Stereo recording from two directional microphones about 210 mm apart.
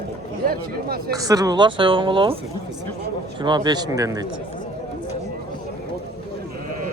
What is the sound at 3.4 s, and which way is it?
Speech, 20° right (ahead or behind).